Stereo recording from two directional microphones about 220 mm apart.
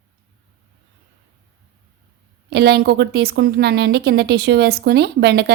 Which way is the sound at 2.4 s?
45° right (ahead or behind).